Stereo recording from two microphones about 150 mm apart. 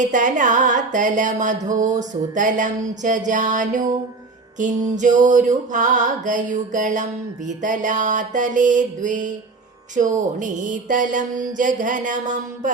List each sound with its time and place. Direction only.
0.0 s music: 55° right (ahead or behind)
1.5 s a sound: 25° right (ahead or behind)
2.3 s music: 60° right (ahead or behind)